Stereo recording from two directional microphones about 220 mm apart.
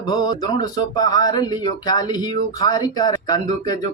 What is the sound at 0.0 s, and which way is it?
Speech, 20° left (ahead or behind).